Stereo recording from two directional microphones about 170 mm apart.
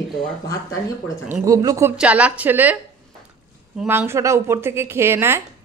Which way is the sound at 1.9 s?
5° right (ahead or behind).